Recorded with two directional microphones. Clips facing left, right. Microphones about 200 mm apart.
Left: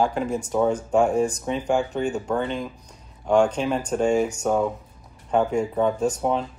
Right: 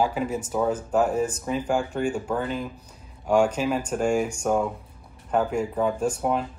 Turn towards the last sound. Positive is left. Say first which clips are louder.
# left 2 dB
turn(degrees=-5)  # may be behind; listen again after turning